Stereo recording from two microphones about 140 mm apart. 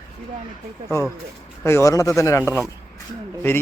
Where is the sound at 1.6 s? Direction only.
20° left (ahead or behind).